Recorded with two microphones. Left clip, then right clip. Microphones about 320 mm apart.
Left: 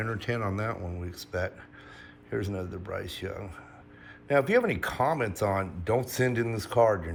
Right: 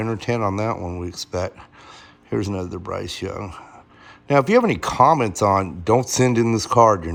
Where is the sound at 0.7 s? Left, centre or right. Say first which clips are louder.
Right 10 dB; right.